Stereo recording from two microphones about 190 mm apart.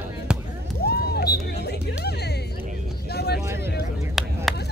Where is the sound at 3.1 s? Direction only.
60° left (ahead or behind).